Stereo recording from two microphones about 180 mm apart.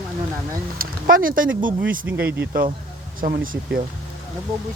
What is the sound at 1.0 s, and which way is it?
Speech, 50° right (ahead or behind).